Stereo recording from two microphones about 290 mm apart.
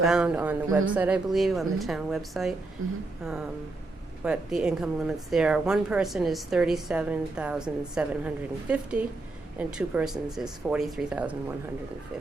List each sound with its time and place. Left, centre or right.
0.0 s a woman's voice: centre
2.8 s a sound: right
4.2 s a woman's voice: centre